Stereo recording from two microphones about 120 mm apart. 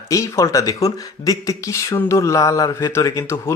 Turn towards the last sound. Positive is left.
turn(degrees=25)  # may be behind; listen again after turning